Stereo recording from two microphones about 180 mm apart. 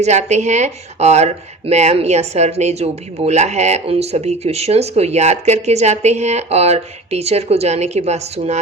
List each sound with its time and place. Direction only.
0.0 s speech: 40° right (ahead or behind)